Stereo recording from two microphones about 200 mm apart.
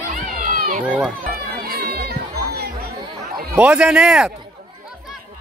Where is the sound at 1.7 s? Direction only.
50° right (ahead or behind).